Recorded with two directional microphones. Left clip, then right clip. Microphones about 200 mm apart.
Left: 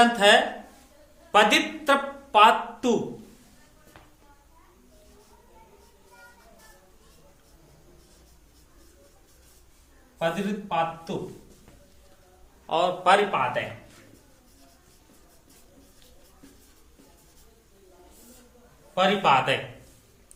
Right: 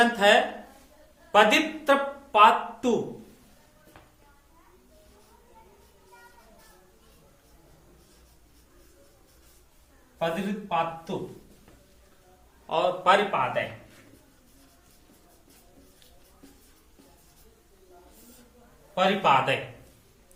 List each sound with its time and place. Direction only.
0.0 s a man's voice: 25° left (ahead or behind)
10.2 s a man's voice: 15° left (ahead or behind)
12.6 s a man's voice: 25° left (ahead or behind)
18.9 s a man's voice: 20° left (ahead or behind)